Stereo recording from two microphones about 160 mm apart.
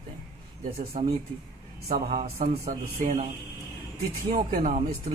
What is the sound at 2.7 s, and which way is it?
Speech, 55° right (ahead or behind).